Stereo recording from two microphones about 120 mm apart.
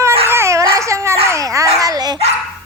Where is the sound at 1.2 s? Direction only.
25° right (ahead or behind).